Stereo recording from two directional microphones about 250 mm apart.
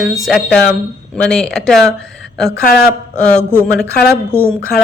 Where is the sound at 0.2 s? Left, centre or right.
Centre.